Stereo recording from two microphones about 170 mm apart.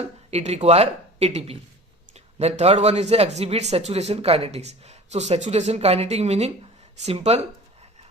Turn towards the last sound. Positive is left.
turn(degrees=-40)  # may be behind; listen again after turning